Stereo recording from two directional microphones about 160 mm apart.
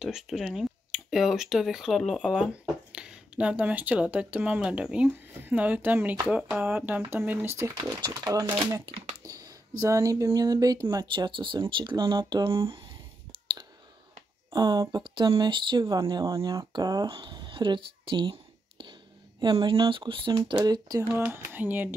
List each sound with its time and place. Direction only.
0.0 s speech: 5° right (ahead or behind); by 8.5 s 20° right (ahead or behind)
8.9 s a sound: 25° right (ahead or behind)
9.8 s speech: 20° right (ahead or behind)
14.5 s speech: 25° right (ahead or behind)
21.1 s speech: 15° right (ahead or behind)